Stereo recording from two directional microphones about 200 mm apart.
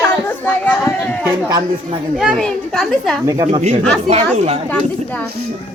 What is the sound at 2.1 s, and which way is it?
A woman's voice, centre (ahead or behind).